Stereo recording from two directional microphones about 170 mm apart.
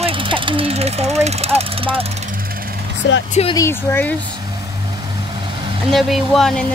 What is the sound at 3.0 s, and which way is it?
Speech, 90° left.